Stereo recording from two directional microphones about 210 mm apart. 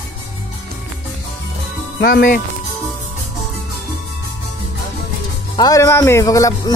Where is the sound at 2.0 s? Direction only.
45° left (ahead or behind).